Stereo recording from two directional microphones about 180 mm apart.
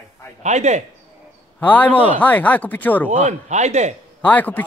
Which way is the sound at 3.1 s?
40° right (ahead or behind).